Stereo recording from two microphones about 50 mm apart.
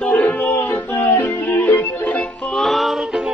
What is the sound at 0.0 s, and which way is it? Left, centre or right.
Music, centre.